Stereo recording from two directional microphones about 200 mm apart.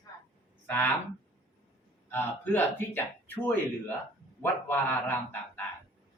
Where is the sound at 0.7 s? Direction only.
10° left (ahead or behind).